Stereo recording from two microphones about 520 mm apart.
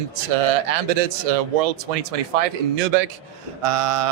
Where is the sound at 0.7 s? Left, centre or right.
Right.